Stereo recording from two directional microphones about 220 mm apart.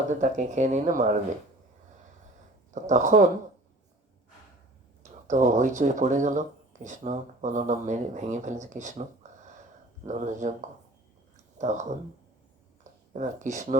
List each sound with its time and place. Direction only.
0.1 s speech: 35° right (ahead or behind)
2.7 s speech: 35° right (ahead or behind)
5.3 s speech: 35° right (ahead or behind)
10.1 s speech: 35° right (ahead or behind)
11.5 s speech: 30° right (ahead or behind)